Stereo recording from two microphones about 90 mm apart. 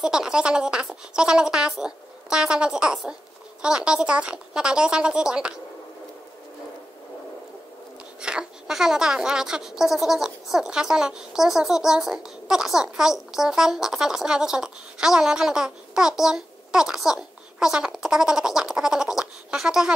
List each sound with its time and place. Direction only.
0.0 s a woman's voice: 10° right (ahead or behind)
8.2 s a woman's voice: 10° right (ahead or behind)